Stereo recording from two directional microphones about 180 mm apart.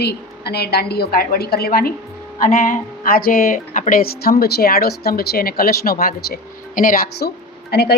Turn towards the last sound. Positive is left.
turn(degrees=65)  # may be behind; listen again after turning